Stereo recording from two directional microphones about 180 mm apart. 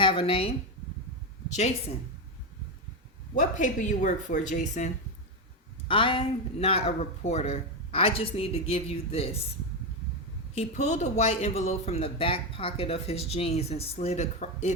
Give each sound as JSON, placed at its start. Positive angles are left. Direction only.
{"t": 0.0, "sound": "speech", "side_deg": 30}
{"t": 3.6, "sound": "a woman's voice", "side_deg": 45}
{"t": 5.9, "sound": "speech", "side_deg": 30}
{"t": 10.5, "sound": "speech", "side_deg": 40}